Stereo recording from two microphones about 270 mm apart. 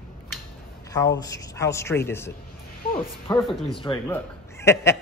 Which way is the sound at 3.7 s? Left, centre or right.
Centre.